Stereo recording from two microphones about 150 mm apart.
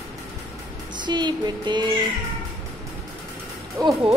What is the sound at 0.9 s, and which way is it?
Music, 30° right (ahead or behind).